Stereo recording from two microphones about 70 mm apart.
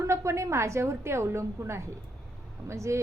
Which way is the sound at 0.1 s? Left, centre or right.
Right.